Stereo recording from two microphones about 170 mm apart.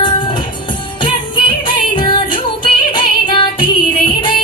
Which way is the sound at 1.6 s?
30° left (ahead or behind).